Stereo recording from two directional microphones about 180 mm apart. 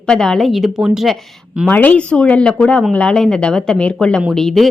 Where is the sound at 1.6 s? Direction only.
10° left (ahead or behind).